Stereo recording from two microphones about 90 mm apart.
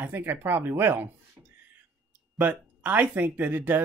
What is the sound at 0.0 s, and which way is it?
Speech, 25° right (ahead or behind).